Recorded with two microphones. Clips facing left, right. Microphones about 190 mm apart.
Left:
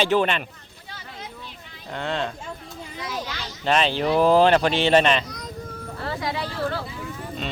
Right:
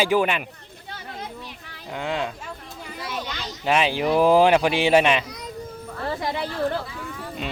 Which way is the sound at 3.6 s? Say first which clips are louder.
Even; 10° right (ahead or behind).